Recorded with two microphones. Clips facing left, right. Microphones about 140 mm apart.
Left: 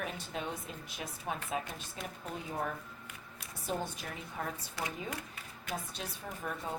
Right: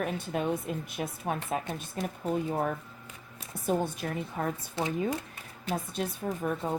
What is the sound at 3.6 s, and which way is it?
Speech, 50° right (ahead or behind).